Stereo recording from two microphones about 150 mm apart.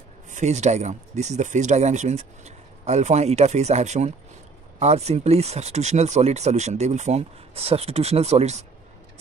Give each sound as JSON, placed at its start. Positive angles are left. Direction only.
{"t": 0.3, "sound": "speech", "side_deg": -50}